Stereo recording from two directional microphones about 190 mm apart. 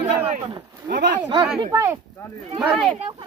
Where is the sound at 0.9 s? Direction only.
60° right (ahead or behind).